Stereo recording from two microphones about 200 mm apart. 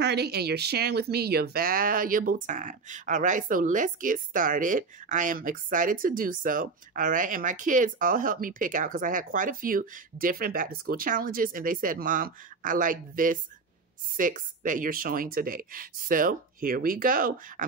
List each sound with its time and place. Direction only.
0.0 s speech: 55° right (ahead or behind)